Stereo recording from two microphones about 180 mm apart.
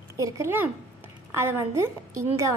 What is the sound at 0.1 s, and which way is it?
A child's voice, 15° right (ahead or behind).